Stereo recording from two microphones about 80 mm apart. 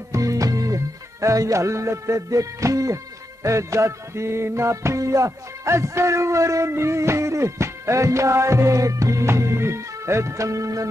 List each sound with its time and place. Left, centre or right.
0.1 s music: right